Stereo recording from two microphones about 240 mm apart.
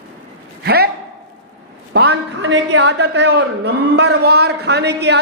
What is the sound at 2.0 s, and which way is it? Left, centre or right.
A woman's voice, right.